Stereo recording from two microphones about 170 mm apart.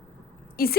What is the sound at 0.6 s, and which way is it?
Speech, 60° left (ahead or behind).